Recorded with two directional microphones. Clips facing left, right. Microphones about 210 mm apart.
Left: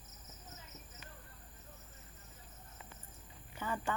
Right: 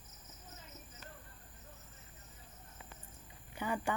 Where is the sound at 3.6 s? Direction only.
15° right (ahead or behind).